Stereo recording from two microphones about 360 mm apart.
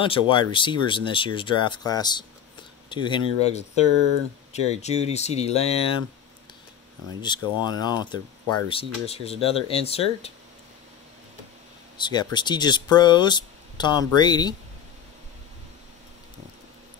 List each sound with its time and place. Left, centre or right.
0.0 s speech: centre
7.2 s speech: centre
12.0 s speech: centre